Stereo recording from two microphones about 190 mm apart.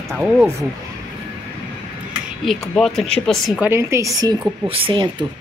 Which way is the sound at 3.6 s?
15° right (ahead or behind).